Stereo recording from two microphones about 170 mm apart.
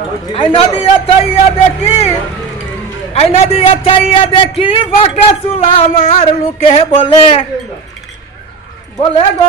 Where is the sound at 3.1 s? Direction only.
35° left (ahead or behind).